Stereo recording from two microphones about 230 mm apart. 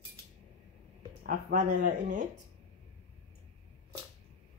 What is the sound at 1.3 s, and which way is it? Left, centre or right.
Speech, right.